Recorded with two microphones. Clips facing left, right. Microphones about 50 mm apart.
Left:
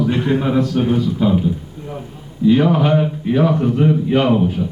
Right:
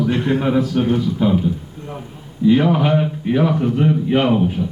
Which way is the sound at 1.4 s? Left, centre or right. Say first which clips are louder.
Left 1 dB; centre.